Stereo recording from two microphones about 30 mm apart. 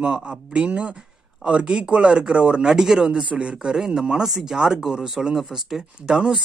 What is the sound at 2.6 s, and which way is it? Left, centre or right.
Speech, centre.